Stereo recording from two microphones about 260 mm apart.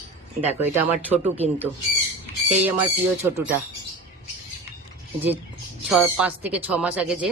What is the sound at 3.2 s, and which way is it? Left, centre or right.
Speech, centre.